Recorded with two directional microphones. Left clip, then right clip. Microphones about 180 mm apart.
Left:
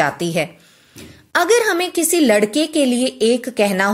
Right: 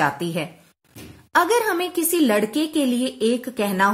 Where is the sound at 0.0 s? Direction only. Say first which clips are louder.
Left 4 dB; 20° left (ahead or behind).